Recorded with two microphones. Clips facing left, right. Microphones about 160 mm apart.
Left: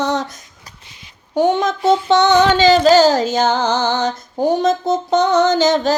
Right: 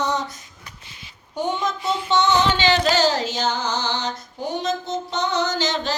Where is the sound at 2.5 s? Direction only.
40° left (ahead or behind).